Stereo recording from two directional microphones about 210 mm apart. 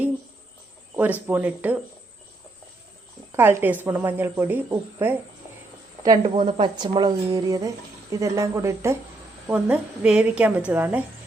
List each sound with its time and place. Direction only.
1.3 s a woman's voice: 10° right (ahead or behind)
3.3 s a woman's voice: 10° right (ahead or behind)